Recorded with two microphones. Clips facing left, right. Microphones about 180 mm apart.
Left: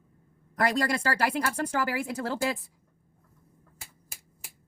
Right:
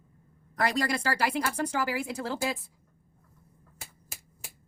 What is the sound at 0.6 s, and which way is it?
Speech, 50° left (ahead or behind).